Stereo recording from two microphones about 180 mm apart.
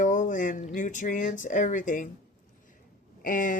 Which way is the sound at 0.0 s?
45° left (ahead or behind).